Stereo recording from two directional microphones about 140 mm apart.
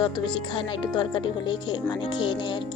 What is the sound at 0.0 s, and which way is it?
Speech, 35° left (ahead or behind).